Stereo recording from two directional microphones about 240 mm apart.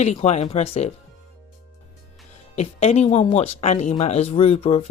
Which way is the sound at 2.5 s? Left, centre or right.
Left.